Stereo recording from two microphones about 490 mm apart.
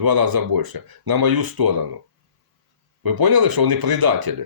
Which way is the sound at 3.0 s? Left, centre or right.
Right.